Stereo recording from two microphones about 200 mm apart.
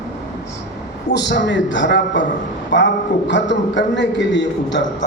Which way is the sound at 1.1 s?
60° left (ahead or behind).